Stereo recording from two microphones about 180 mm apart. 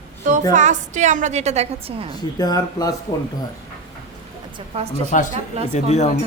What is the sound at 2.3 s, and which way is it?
Speech, 20° left (ahead or behind).